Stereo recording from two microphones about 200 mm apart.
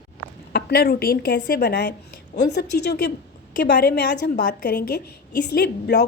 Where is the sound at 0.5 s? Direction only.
50° left (ahead or behind).